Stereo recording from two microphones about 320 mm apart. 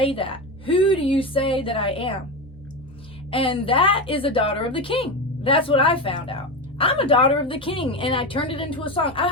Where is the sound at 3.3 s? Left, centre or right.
Centre.